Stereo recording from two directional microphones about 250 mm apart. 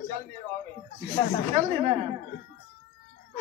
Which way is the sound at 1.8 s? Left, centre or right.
Right.